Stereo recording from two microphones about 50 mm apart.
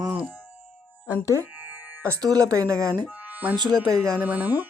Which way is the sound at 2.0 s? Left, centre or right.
Right.